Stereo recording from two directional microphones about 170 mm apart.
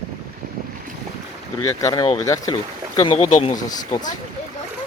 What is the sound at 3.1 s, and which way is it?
Speech, 35° left (ahead or behind).